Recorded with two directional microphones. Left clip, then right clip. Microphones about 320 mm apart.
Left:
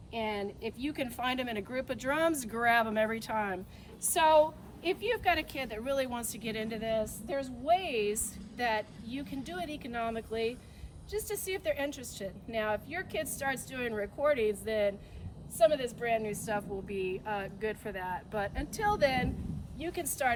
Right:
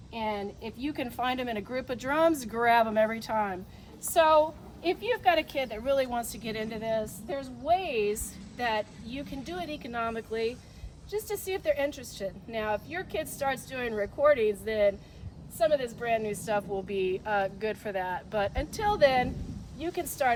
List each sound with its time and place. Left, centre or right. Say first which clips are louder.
0.1 s a woman's voice: right 2 dB; centre